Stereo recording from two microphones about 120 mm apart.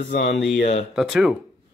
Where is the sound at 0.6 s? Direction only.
90° left.